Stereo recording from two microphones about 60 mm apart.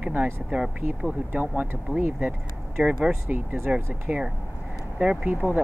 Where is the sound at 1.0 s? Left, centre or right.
Right.